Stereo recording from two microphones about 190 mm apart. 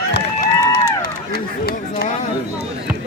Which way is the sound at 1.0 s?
55° left (ahead or behind).